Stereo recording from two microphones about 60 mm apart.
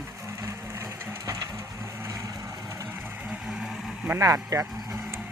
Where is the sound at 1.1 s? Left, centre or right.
Right.